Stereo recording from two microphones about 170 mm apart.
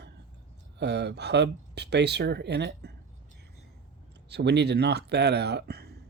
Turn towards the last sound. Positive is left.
turn(degrees=-70)  # may be behind; listen again after turning